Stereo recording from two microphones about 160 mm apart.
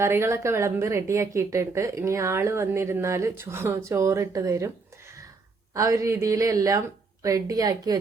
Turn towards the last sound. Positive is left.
turn(degrees=-25)  # may be behind; listen again after turning